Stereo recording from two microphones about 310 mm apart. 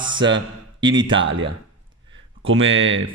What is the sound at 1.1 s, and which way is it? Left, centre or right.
Speech, right.